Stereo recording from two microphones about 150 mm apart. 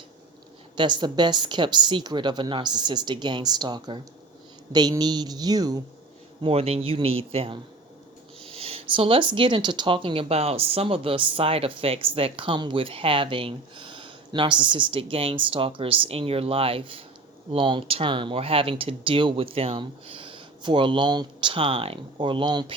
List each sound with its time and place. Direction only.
0.8 s a woman's voice: 30° right (ahead or behind)
6.4 s speech: 40° right (ahead or behind)